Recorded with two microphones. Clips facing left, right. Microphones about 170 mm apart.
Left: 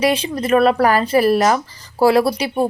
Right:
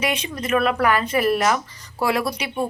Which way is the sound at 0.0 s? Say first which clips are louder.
Left 7 dB; 30° left (ahead or behind).